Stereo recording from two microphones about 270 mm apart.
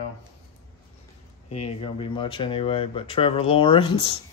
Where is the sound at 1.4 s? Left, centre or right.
Left.